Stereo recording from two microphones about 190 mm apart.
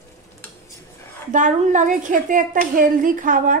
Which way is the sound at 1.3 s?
40° right (ahead or behind).